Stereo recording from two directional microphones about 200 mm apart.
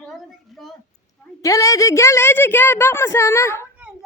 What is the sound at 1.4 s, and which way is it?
A woman's voice, 15° left (ahead or behind).